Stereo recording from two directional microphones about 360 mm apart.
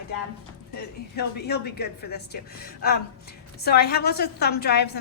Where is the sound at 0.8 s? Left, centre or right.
Left.